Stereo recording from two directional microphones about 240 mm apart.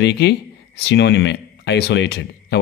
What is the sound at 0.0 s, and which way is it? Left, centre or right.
A man's voice, left.